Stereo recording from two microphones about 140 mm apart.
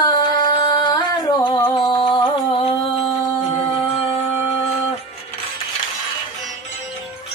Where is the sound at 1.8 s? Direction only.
35° left (ahead or behind).